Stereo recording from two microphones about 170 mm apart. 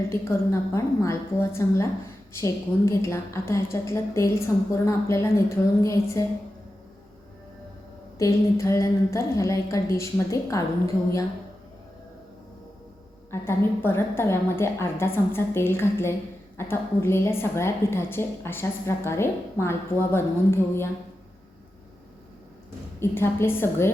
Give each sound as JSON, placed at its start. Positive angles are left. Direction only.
{"t": 0.1, "sound": "a woman's voice", "side_deg": 15}
{"t": 8.2, "sound": "a woman's voice", "side_deg": 15}
{"t": 13.3, "sound": "a woman's voice", "side_deg": 15}
{"t": 23.0, "sound": "a woman's voice", "side_deg": 15}